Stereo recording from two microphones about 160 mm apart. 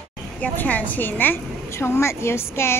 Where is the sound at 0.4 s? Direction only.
10° left (ahead or behind).